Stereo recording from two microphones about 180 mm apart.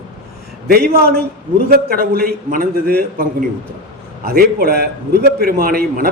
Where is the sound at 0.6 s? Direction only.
55° right (ahead or behind).